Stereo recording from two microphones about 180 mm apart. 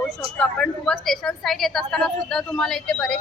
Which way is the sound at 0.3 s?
5° left (ahead or behind).